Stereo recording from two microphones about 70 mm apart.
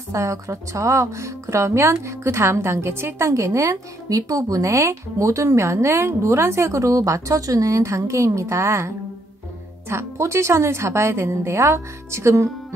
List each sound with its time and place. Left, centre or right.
0.1 s a woman's voice: right
3.3 s a woman's voice: right